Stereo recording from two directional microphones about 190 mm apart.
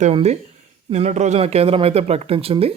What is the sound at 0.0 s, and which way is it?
Speech, 35° right (ahead or behind).